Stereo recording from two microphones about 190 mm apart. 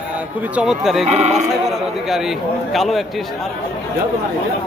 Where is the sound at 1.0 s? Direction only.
35° right (ahead or behind).